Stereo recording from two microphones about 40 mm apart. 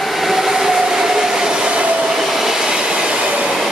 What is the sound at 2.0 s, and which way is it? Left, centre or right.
Train, centre.